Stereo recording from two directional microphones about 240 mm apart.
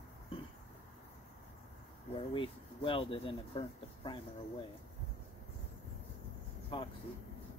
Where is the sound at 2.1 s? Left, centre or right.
Left.